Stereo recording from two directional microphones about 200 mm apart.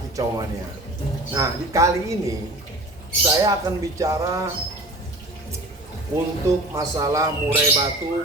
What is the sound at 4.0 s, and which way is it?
Speech, 15° right (ahead or behind).